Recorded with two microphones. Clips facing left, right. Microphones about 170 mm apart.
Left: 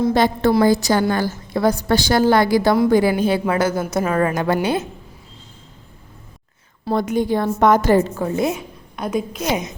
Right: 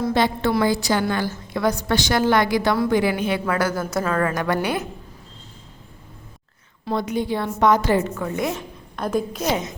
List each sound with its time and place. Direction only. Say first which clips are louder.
0.1 s a woman's voice: left 4 dB; 40° left (ahead or behind); by 4.9 s 25° left (ahead or behind)
6.9 s a woman's voice: left 4 dB; 50° left (ahead or behind); by 8.5 s 30° left (ahead or behind)
8.5 s a woman's voice: even; 5° left (ahead or behind)
9.5 s a woman's voice: left 2 dB; 15° left (ahead or behind)